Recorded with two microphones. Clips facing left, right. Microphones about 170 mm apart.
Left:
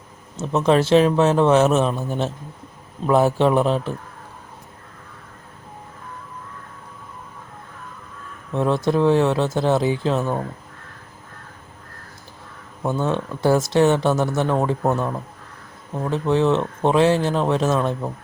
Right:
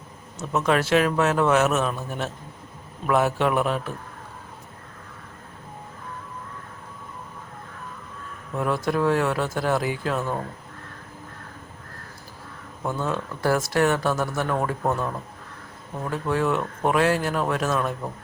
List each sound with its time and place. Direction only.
0.3 s speech: 30° left (ahead or behind)
8.5 s speech: 25° left (ahead or behind)
12.8 s speech: 25° left (ahead or behind)